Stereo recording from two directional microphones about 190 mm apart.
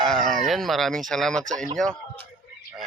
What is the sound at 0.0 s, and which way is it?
Speech, centre (ahead or behind).